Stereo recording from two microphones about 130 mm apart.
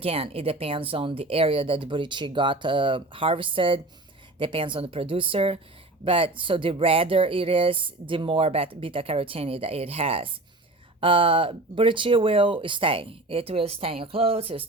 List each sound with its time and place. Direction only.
0.0 s speech: 45° right (ahead or behind)